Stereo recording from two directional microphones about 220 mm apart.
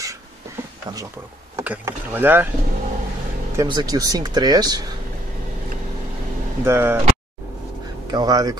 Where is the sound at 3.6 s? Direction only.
20° right (ahead or behind).